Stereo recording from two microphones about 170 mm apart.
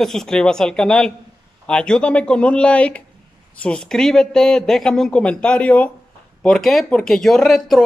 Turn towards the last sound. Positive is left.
turn(degrees=0)  # may be behind; listen again after turning